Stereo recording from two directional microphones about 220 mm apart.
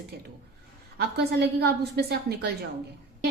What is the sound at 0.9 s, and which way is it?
A woman's voice, 45° right (ahead or behind).